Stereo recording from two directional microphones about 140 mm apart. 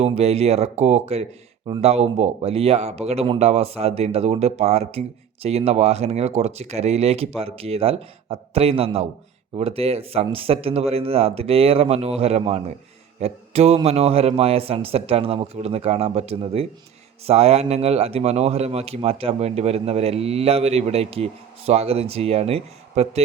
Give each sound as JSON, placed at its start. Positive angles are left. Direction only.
{"t": 0.0, "sound": "speech", "side_deg": -50}